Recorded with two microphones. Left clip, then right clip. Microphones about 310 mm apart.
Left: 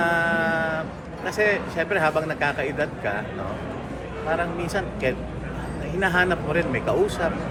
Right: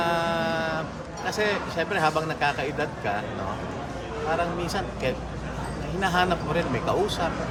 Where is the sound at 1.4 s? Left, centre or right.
Centre.